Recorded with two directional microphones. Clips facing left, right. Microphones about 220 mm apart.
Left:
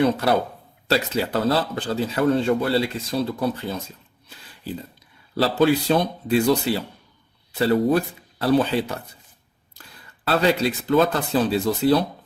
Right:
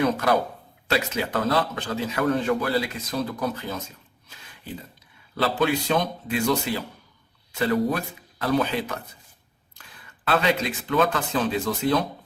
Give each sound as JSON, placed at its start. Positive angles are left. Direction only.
{"t": 0.0, "sound": "a man's voice", "side_deg": 30}
{"t": 5.3, "sound": "a man's voice", "side_deg": 35}
{"t": 10.2, "sound": "a man's voice", "side_deg": 35}